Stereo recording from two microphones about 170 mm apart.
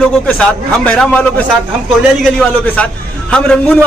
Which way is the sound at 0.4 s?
5° left (ahead or behind).